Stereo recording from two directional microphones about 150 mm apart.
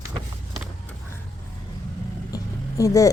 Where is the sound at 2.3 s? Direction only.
20° left (ahead or behind).